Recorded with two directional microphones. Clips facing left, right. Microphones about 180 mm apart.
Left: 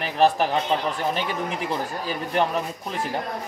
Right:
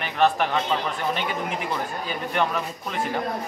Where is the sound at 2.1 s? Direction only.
30° left (ahead or behind).